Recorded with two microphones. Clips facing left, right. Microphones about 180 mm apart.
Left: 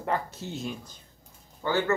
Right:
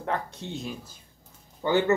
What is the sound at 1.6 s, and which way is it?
Speech, 20° right (ahead or behind).